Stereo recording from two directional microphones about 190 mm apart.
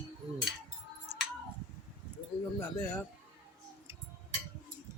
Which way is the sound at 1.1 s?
35° right (ahead or behind).